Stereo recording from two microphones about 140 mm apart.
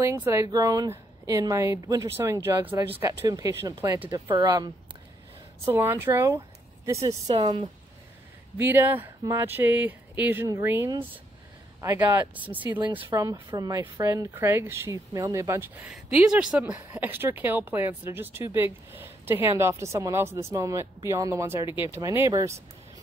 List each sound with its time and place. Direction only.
0.0 s speech: 20° right (ahead or behind)
3.0 s speech: 25° right (ahead or behind)
5.7 s speech: 15° right (ahead or behind)
8.5 s speech: 15° right (ahead or behind)
13.1 s speech: 25° right (ahead or behind)
15.9 s speech: 5° right (ahead or behind); by 21.6 s 20° right (ahead or behind)
21.6 s speech: 35° left (ahead or behind)
21.9 s speech: 20° right (ahead or behind)